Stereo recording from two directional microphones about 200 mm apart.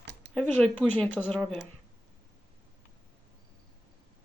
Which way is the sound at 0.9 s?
10° left (ahead or behind).